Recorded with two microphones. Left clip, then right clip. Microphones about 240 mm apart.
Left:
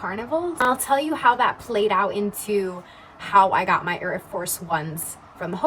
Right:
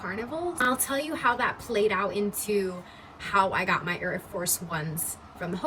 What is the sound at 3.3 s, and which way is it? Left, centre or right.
Speech, centre.